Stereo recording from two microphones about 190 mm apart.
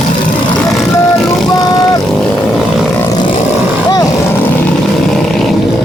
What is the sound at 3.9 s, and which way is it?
Vehicle, 15° left (ahead or behind).